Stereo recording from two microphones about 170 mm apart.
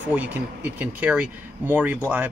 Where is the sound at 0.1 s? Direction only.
10° right (ahead or behind).